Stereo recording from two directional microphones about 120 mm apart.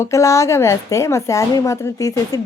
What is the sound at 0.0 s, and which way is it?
A woman's voice, 25° left (ahead or behind).